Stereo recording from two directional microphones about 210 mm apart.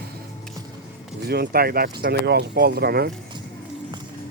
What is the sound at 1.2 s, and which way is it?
Speech, 50° right (ahead or behind).